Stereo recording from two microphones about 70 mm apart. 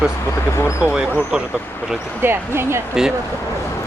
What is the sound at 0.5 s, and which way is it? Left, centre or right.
Speech, left.